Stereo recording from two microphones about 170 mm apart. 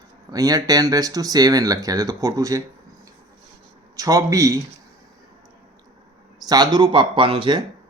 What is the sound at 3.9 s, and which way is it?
Speech, 20° right (ahead or behind).